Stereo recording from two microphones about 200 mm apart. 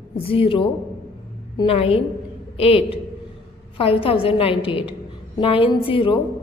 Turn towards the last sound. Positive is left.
turn(degrees=25)  # may be behind; listen again after turning